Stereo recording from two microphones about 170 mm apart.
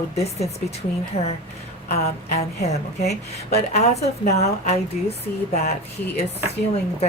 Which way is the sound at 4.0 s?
40° left (ahead or behind).